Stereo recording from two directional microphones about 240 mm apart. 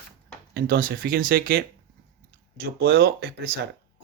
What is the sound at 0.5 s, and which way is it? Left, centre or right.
Speech, right.